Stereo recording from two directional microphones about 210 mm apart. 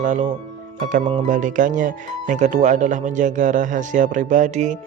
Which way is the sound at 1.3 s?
40° right (ahead or behind).